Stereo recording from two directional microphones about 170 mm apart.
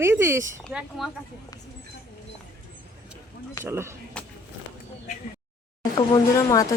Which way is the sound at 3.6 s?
15° right (ahead or behind).